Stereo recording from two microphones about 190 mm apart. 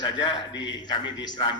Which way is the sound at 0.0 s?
25° left (ahead or behind).